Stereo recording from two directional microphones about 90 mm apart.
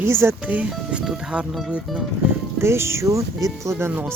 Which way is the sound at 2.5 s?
30° right (ahead or behind).